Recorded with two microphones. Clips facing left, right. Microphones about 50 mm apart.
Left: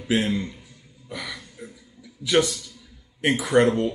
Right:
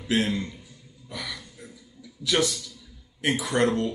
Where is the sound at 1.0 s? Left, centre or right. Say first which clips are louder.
Left 2 dB; centre.